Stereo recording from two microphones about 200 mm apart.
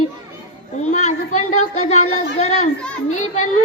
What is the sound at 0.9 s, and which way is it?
Speech, 35° left (ahead or behind).